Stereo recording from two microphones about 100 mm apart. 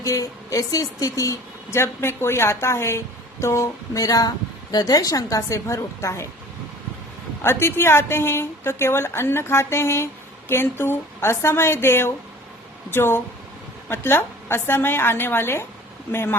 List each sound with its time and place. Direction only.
0.0 s a woman's voice: 35° left (ahead or behind)
7.4 s a woman's voice: 25° left (ahead or behind)